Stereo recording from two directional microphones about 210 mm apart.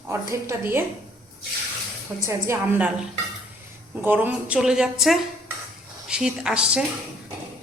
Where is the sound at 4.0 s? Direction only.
10° right (ahead or behind).